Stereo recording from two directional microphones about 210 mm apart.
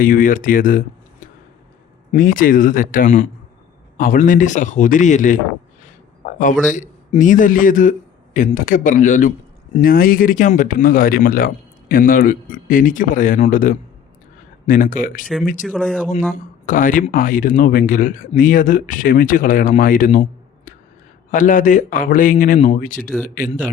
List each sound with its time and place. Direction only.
0.0 s a man's voice: 40° left (ahead or behind)
2.1 s a man's voice: 40° left (ahead or behind)
15.6 s speech: 5° left (ahead or behind)
16.3 s a man's voice: 40° left (ahead or behind)
21.2 s a man's voice: 40° left (ahead or behind)